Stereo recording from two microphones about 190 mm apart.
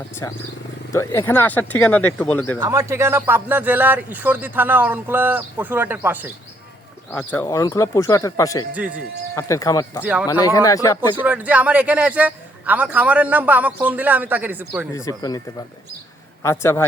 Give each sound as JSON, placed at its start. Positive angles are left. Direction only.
{"t": 0.2, "sound": "speech", "side_deg": 15}
{"t": 2.6, "sound": "a man's voice", "side_deg": -15}
{"t": 7.1, "sound": "speech", "side_deg": 10}
{"t": 10.0, "sound": "a man's voice", "side_deg": -5}
{"t": 10.2, "sound": "speech", "side_deg": 15}
{"t": 11.2, "sound": "a man's voice", "side_deg": -10}
{"t": 14.9, "sound": "speech", "side_deg": 20}
{"t": 16.4, "sound": "speech", "side_deg": 15}